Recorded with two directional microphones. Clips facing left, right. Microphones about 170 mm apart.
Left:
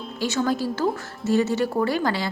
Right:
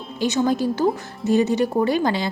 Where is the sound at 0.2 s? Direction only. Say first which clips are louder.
Right 4 dB; 20° right (ahead or behind).